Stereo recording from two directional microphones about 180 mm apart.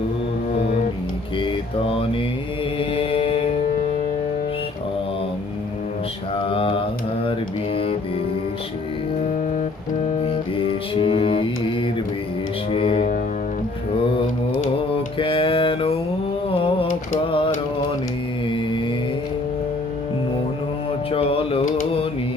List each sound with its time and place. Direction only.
1.4 s mantra: 30° left (ahead or behind)
6.3 s mantra: 30° left (ahead or behind)
10.2 s music: 30° left (ahead or behind)
15.2 s mantra: 30° left (ahead or behind)
16.5 s a sound: 30° left (ahead or behind)
21.1 s a sound: 35° left (ahead or behind)